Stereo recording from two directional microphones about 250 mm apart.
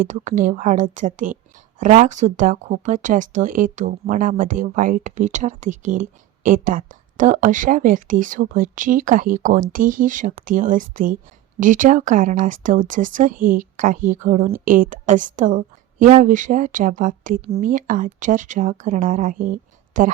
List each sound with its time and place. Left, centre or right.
0.0 s speech: right